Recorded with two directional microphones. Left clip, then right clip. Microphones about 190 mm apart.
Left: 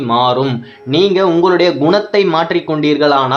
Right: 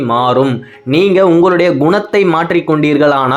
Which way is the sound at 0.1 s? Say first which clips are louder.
Right 1 dB; 15° right (ahead or behind).